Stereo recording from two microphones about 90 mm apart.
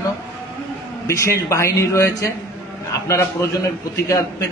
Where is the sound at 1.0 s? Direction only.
35° left (ahead or behind).